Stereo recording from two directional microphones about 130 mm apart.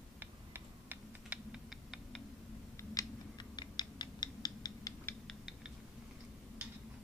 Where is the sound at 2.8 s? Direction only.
25° left (ahead or behind).